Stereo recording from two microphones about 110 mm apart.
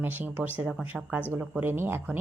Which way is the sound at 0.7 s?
5° right (ahead or behind).